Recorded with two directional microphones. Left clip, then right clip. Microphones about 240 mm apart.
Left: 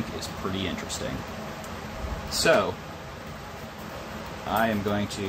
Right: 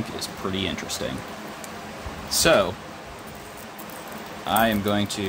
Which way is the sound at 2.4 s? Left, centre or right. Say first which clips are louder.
Right 3 dB; right.